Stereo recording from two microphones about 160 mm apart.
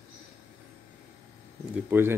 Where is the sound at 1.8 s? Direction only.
15° right (ahead or behind).